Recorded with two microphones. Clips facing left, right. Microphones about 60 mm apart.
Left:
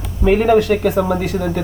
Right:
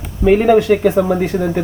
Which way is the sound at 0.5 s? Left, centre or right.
Centre.